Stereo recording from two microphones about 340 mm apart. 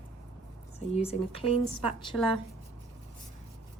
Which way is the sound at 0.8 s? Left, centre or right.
Centre.